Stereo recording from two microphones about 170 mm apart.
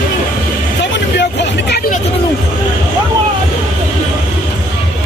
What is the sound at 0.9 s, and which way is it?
Hubbub, 85° left.